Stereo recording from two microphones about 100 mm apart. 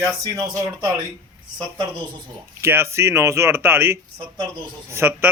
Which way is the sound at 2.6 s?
25° right (ahead or behind).